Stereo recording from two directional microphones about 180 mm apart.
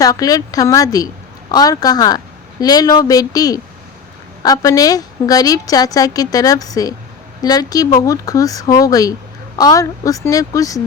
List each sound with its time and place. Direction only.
0.0 s a woman's voice: 20° left (ahead or behind)